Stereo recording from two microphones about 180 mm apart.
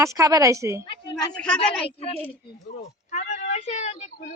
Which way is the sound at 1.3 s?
5° left (ahead or behind).